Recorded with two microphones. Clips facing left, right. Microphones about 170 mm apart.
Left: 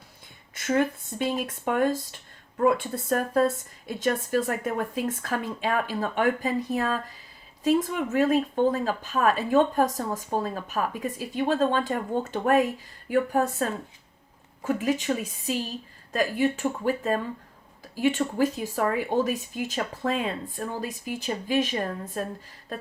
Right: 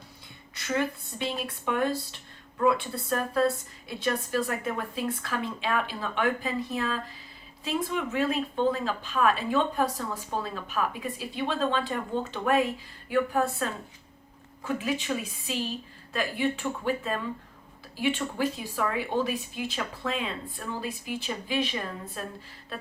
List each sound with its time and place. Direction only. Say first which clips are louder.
0.5 s a woman's voice: left 5 dB; 45° left (ahead or behind)